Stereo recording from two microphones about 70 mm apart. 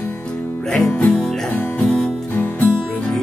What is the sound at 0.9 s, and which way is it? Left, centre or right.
Music, centre.